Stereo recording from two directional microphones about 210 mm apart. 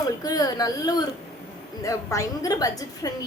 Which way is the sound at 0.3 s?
15° left (ahead or behind).